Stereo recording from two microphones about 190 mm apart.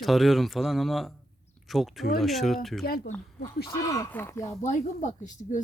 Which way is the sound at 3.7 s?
15° left (ahead or behind).